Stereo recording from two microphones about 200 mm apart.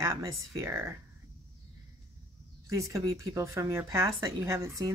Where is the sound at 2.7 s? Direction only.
15° right (ahead or behind).